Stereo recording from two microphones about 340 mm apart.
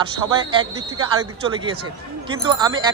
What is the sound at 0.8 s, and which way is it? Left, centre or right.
Speech, right.